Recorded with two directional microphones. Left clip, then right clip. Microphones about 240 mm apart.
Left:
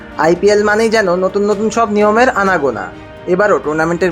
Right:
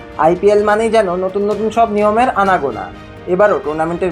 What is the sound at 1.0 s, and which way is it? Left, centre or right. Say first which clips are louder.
A man's voice: left 2 dB; left.